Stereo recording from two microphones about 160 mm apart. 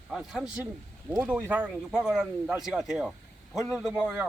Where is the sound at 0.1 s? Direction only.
5° right (ahead or behind).